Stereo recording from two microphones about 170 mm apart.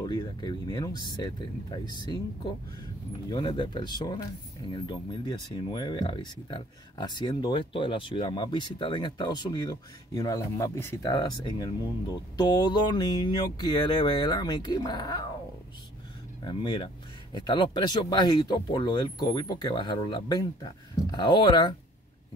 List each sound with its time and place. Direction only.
0.0 s speech: 25° left (ahead or behind)
3.3 s speech: 25° left (ahead or behind)
16.4 s speech: 25° left (ahead or behind)